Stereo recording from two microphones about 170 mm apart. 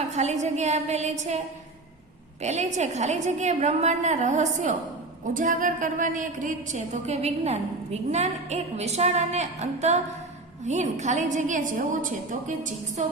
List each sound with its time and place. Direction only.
0.1 s a woman's voice: 40° right (ahead or behind)
2.4 s a woman's voice: 40° right (ahead or behind)